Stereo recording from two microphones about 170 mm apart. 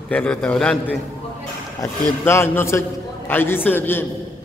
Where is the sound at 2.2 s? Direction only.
15° left (ahead or behind).